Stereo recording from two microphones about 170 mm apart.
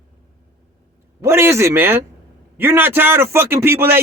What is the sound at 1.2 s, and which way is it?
A man's voice, 15° right (ahead or behind).